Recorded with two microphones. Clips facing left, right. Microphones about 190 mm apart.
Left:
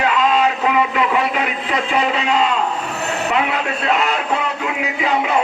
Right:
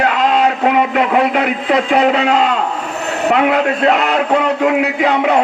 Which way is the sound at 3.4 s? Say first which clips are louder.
Right 8 dB; 65° right (ahead or behind).